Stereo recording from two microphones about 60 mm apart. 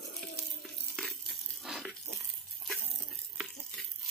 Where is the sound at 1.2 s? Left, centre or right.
Centre.